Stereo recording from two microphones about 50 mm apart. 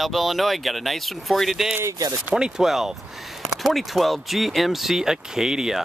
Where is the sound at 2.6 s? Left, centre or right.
Centre.